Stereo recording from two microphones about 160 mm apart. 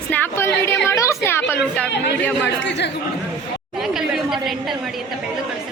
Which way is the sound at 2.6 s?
90° left.